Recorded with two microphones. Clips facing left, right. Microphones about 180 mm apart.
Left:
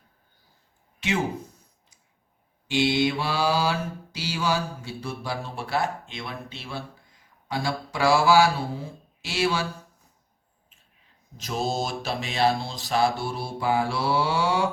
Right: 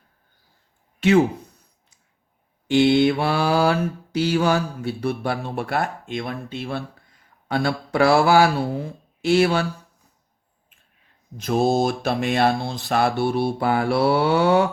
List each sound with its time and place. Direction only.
2.6 s mantra: 55° right (ahead or behind)
11.3 s mantra: 55° right (ahead or behind)